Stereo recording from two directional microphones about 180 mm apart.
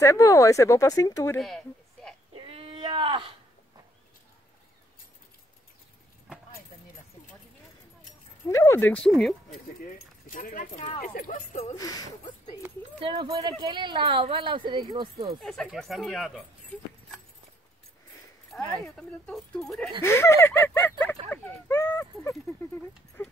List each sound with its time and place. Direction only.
0.0 s speech: 15° left (ahead or behind)
2.3 s baby cry: 30° right (ahead or behind)
8.5 s speech: 15° left (ahead or behind); by 9.6 s centre (ahead or behind)
10.2 s speech: 50° left (ahead or behind)
11.7 s speech: 20° left (ahead or behind)
13.0 s speech: 30° right (ahead or behind)
15.4 s speech: centre (ahead or behind)
18.5 s speech: 5° left (ahead or behind)
20.0 s speech: 15° left (ahead or behind)